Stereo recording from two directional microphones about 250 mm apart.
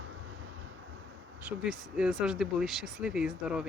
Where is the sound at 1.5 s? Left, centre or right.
Centre.